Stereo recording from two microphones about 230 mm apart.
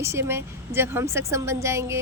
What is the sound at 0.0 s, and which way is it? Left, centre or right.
Speech, centre.